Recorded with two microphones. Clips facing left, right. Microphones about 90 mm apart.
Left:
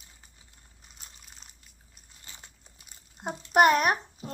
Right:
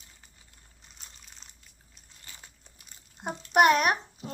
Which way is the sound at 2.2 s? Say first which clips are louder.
Even; 20° left (ahead or behind).